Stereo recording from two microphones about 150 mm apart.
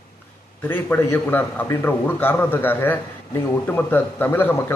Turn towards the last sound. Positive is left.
turn(degrees=15)  # may be behind; listen again after turning